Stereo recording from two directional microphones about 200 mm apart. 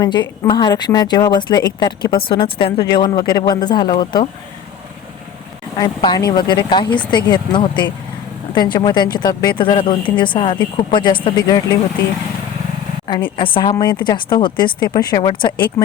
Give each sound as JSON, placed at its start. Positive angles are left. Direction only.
{"t": 0.0, "sound": "a woman's voice", "side_deg": 20}
{"t": 5.7, "sound": "a woman's voice", "side_deg": 20}
{"t": 13.3, "sound": "a woman's voice", "side_deg": 25}